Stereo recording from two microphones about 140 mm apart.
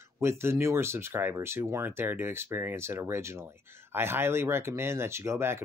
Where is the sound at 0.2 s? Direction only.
20° right (ahead or behind).